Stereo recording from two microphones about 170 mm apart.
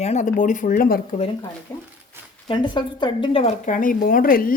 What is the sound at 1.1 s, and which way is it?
Speech, 35° left (ahead or behind).